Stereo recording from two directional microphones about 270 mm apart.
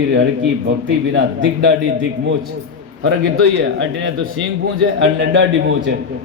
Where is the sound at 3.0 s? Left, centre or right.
Right.